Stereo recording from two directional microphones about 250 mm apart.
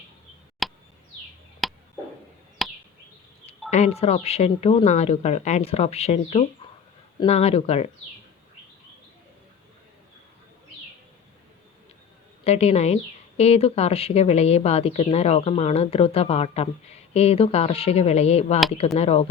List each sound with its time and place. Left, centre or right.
0.6 s a sound: centre
2.6 s chop: centre
3.7 s a woman's voice: left
12.5 s a woman's voice: left